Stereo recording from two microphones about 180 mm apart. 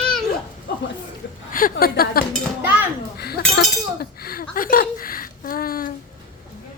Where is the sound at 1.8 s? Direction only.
55° left (ahead or behind).